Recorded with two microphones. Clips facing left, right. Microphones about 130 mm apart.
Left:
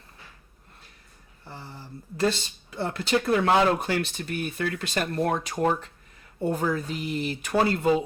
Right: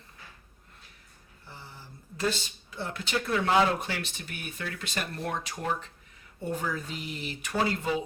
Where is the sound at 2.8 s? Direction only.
55° left (ahead or behind).